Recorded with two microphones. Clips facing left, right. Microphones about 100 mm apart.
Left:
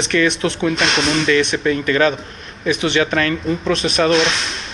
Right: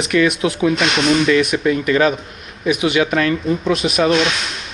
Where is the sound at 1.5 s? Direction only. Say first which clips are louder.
Right 2 dB; 25° right (ahead or behind).